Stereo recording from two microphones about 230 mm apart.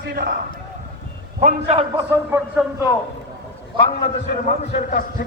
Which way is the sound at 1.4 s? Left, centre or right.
Right.